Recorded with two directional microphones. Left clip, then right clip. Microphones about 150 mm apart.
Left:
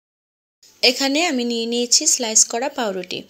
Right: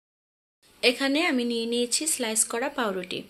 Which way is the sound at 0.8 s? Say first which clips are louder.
Left 6 dB; 30° left (ahead or behind).